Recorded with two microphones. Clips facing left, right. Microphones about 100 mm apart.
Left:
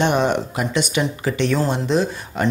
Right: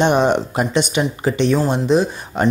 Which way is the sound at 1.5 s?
15° right (ahead or behind).